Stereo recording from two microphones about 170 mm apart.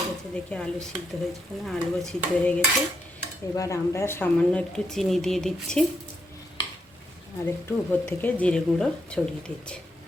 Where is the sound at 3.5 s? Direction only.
20° left (ahead or behind); by 5.8 s 5° left (ahead or behind).